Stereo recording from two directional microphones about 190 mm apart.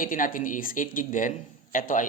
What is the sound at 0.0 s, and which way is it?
Speech, 45° left (ahead or behind).